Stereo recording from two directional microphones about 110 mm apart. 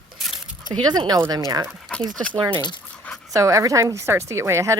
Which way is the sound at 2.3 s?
55° right (ahead or behind).